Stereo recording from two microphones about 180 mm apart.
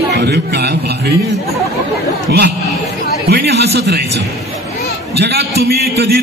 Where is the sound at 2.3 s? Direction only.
65° right (ahead or behind).